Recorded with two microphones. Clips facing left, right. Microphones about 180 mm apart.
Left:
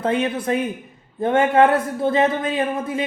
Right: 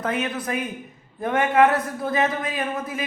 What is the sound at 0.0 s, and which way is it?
Speech, 30° left (ahead or behind).